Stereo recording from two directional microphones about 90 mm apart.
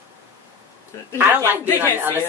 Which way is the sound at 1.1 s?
25° right (ahead or behind).